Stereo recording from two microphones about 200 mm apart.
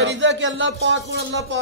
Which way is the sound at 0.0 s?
65° right (ahead or behind).